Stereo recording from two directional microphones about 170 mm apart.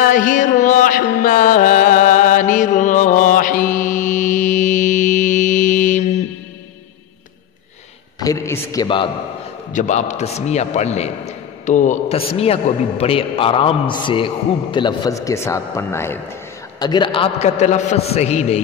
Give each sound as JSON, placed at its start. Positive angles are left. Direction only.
{"t": 0.0, "sound": "music", "side_deg": 50}
{"t": 8.2, "sound": "a sound", "side_deg": 20}
{"t": 8.7, "sound": "a man's voice", "side_deg": 30}
{"t": 9.7, "sound": "a man's voice", "side_deg": 45}
{"t": 16.8, "sound": "a man's voice", "side_deg": 25}